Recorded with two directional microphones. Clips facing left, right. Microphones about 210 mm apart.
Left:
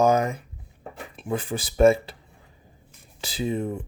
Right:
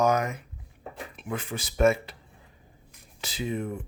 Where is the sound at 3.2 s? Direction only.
30° left (ahead or behind).